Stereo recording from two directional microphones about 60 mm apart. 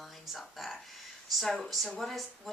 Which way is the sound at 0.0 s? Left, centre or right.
Centre.